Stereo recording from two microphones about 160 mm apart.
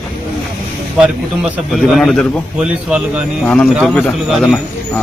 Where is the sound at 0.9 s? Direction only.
5° right (ahead or behind).